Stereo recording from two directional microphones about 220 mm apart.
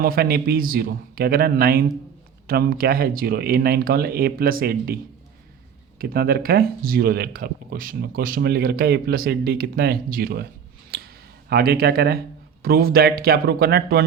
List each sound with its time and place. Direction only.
0.0 s speech: 45° right (ahead or behind)
6.0 s speech: 45° right (ahead or behind)
10.9 s a sound: 45° right (ahead or behind)
12.6 s speech: 45° right (ahead or behind)